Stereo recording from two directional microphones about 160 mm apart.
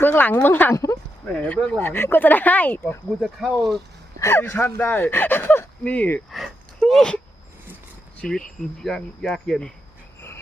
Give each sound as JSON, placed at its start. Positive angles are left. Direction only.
{"t": 0.0, "sound": "speech", "side_deg": 10}
{"t": 1.5, "sound": "speech", "side_deg": 0}
{"t": 1.8, "sound": "speech", "side_deg": 15}
{"t": 3.1, "sound": "speech", "side_deg": 0}
{"t": 4.2, "sound": "speech", "side_deg": 15}
{"t": 6.4, "sound": "a sound", "side_deg": 0}
{"t": 8.2, "sound": "speech", "side_deg": 5}